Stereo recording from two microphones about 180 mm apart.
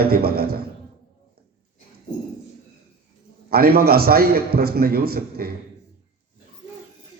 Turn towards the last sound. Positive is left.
turn(degrees=-55)  # may be behind; listen again after turning